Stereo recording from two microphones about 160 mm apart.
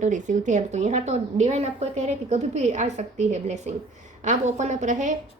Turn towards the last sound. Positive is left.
turn(degrees=-50)  # may be behind; listen again after turning